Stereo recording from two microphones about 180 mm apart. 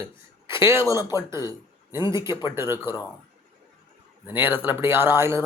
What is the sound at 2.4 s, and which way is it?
Speech, 15° right (ahead or behind).